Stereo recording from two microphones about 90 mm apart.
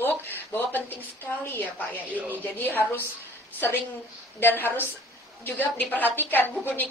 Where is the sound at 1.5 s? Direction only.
25° left (ahead or behind).